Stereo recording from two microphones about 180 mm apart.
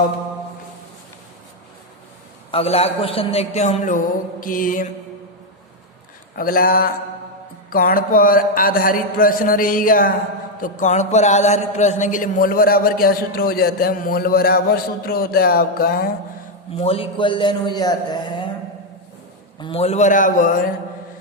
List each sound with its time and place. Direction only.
2.5 s a man's voice: 35° left (ahead or behind)
6.3 s speech: 50° left (ahead or behind)
16.7 s a man's voice: 30° left (ahead or behind)
19.5 s a man's voice: 30° left (ahead or behind); by 20.7 s 45° left (ahead or behind)